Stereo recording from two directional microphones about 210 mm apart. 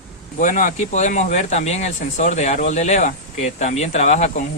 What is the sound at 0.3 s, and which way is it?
Speech, 40° left (ahead or behind).